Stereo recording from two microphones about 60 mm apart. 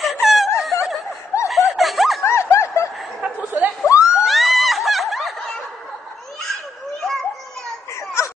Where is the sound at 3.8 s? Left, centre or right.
Left.